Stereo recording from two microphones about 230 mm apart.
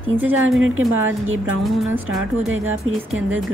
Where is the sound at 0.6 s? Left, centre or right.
Right.